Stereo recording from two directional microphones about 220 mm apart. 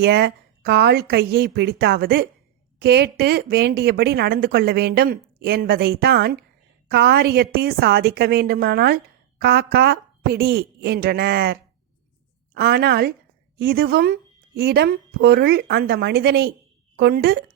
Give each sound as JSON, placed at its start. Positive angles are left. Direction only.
{"t": 0.0, "sound": "speech", "side_deg": -45}